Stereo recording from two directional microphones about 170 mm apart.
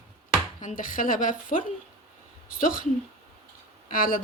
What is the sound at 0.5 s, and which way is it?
Speech, 50° left (ahead or behind).